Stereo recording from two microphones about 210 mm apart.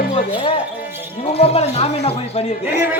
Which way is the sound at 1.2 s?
30° left (ahead or behind).